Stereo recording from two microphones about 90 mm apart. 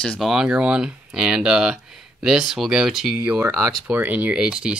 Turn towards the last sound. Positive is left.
turn(degrees=-10)  # may be behind; listen again after turning